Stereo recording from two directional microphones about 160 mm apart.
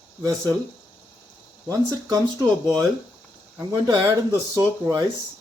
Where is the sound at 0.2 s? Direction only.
25° right (ahead or behind).